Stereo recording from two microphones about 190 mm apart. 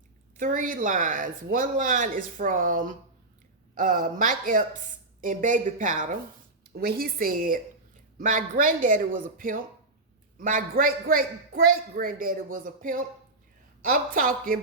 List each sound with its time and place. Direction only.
0.3 s speech: 45° right (ahead or behind)